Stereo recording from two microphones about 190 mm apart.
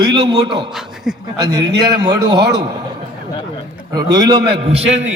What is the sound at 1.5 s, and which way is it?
Speech, 20° right (ahead or behind).